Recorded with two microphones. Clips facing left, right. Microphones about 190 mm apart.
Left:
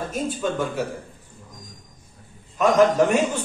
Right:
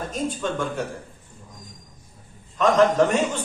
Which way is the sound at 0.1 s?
5° left (ahead or behind).